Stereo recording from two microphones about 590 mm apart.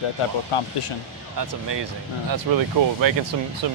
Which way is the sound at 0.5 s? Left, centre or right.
Left.